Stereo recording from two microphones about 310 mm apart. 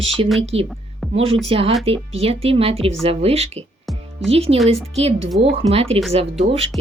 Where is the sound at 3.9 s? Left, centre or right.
Centre.